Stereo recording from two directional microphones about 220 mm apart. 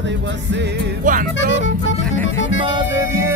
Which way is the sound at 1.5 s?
55° left (ahead or behind).